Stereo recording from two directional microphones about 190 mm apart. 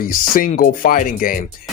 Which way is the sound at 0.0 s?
45° left (ahead or behind).